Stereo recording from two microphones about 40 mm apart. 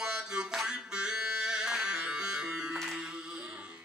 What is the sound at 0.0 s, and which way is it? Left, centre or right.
Music, right.